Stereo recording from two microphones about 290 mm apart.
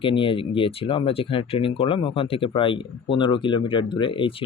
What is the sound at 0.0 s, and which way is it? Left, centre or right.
Speech, centre.